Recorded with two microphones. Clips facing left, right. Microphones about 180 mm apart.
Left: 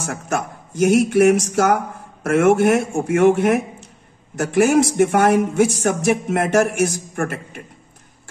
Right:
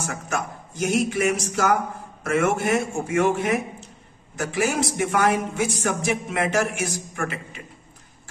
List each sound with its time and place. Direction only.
0.0 s a man's voice: 50° left (ahead or behind)